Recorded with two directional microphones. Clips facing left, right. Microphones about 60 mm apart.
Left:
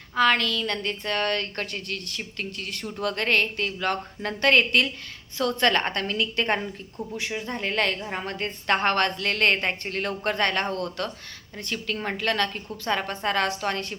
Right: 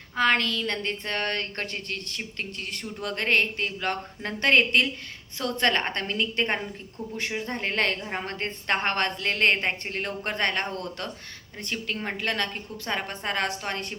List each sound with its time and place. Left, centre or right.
0.2 s a woman's voice: right
7.2 s a woman's voice: right; by 13.5 s centre